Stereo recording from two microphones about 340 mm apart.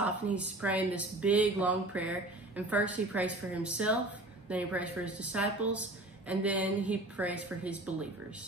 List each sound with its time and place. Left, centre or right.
0.0 s speech: centre